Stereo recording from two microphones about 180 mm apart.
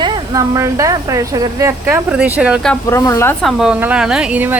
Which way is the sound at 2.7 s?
15° left (ahead or behind).